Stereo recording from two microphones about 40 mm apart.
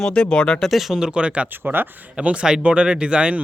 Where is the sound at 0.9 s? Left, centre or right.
Right.